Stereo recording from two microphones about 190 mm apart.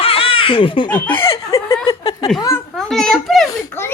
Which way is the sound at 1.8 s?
30° left (ahead or behind).